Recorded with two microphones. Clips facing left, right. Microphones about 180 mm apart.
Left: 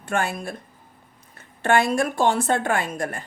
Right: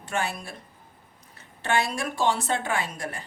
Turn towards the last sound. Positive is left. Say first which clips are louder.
# left 5 dB
turn(degrees=50)  # may be behind; listen again after turning